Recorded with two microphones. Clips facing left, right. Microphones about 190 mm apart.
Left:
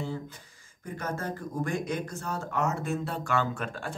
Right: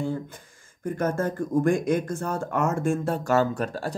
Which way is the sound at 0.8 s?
50° right (ahead or behind).